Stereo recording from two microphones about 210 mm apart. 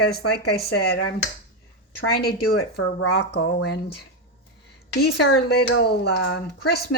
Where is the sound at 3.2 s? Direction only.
60° left (ahead or behind).